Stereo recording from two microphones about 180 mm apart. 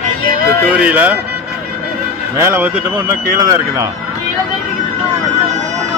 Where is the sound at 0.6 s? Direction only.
10° right (ahead or behind).